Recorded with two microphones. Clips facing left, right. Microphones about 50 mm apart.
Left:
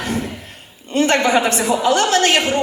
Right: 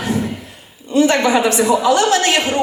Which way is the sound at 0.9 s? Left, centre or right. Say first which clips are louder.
Right 2 dB; left.